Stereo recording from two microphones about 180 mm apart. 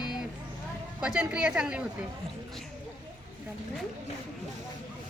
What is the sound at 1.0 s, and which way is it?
Speech, 5° right (ahead or behind).